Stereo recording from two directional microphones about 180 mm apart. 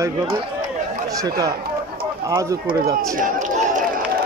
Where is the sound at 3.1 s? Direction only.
45° right (ahead or behind).